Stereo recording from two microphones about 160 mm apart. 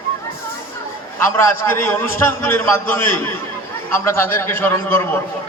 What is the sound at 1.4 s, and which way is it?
A man's voice, 15° left (ahead or behind).